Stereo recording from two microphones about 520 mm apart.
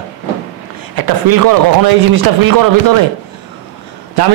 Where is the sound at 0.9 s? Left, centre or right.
Right.